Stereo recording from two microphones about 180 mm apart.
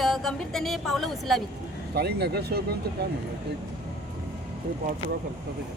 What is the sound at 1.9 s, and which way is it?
Speech, 65° right (ahead or behind).